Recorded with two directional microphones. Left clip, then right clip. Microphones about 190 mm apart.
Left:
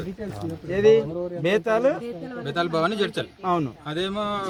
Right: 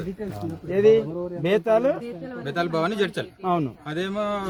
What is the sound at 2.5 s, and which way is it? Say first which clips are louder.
Speech: left 1 dB; 15° right (ahead or behind).